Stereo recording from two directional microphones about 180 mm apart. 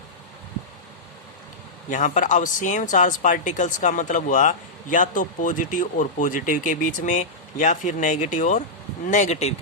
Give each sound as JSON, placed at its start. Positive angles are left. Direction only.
{"t": 1.9, "sound": "speech", "side_deg": 45}